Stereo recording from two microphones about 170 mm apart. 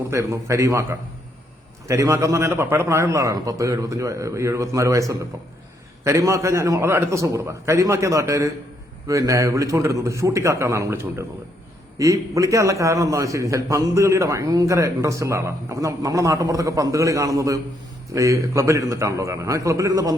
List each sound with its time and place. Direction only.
0.1 s a man's voice: 15° right (ahead or behind)